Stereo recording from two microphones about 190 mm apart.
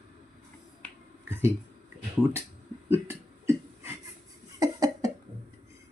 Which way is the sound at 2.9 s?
15° right (ahead or behind).